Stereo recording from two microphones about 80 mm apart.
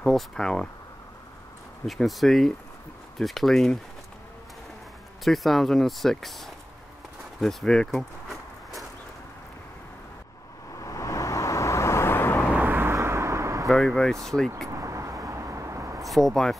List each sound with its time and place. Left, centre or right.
0.0 s speech: centre
1.9 s speech: centre
5.2 s speech: centre
10.7 s vehicle: left
12.4 s vehicle: right
13.7 s speech: centre
14.7 s vehicle: right
16.0 s speech: centre